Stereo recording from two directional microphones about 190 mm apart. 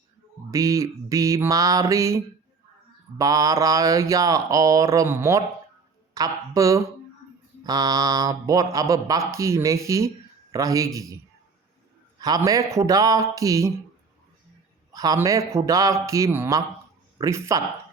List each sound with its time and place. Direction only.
0.5 s speech: 15° right (ahead or behind)
12.5 s speech: 15° right (ahead or behind)
14.9 s speech: 20° right (ahead or behind)